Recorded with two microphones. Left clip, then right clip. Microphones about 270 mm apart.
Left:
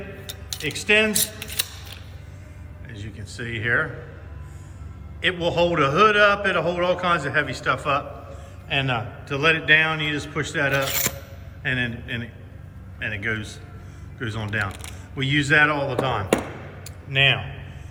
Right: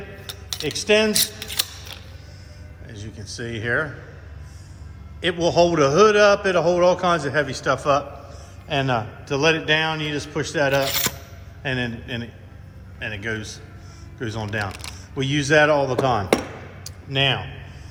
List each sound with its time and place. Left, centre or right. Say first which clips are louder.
0.7 s a man's voice: right 1 dB; centre
2.9 s speech: right 2 dB; centre
5.2 s a man's voice: right 3 dB; centre
14.7 s single-lens reflex camera: right 3 dB; right
15.1 s a man's voice: right 1 dB; centre
16.8 s a sound: left 2 dB; centre